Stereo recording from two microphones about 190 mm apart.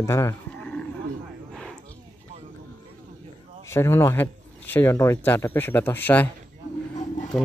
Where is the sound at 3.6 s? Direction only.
15° left (ahead or behind).